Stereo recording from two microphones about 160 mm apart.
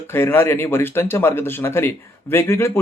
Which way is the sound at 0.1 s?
15° left (ahead or behind).